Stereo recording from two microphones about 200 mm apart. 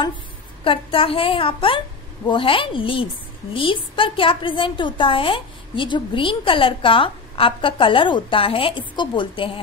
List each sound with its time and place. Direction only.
0.7 s a woman's voice: 25° left (ahead or behind)